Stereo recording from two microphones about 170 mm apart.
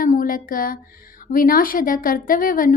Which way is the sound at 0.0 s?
55° left (ahead or behind).